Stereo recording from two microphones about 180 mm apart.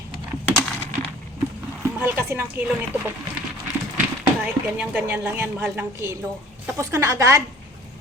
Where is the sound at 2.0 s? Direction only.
10° right (ahead or behind).